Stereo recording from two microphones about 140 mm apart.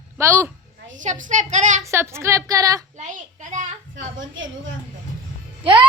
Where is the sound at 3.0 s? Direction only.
65° right (ahead or behind).